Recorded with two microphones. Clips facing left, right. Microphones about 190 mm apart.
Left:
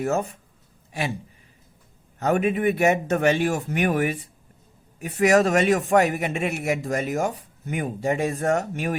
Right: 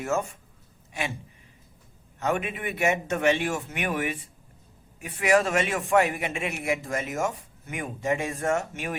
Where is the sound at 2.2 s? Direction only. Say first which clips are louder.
Left 7 dB; 40° left (ahead or behind).